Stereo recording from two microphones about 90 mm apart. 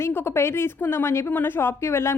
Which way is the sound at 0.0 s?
30° left (ahead or behind).